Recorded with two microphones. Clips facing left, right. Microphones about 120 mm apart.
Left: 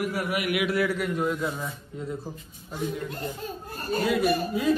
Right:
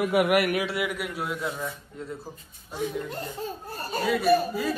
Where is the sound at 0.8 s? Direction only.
10° right (ahead or behind).